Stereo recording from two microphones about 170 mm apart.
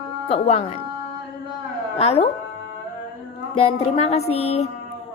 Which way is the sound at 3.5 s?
35° left (ahead or behind).